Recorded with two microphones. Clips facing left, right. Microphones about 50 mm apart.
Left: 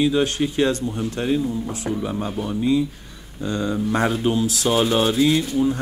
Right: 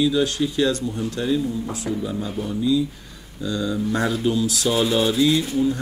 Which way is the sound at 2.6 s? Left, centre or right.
Left.